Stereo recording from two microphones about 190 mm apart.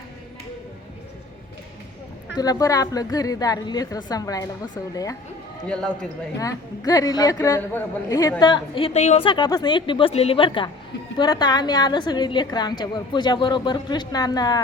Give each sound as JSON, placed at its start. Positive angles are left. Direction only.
{"t": 2.3, "sound": "a woman's voice", "side_deg": 20}
{"t": 5.6, "sound": "speech", "side_deg": 5}
{"t": 6.4, "sound": "a woman's voice", "side_deg": 20}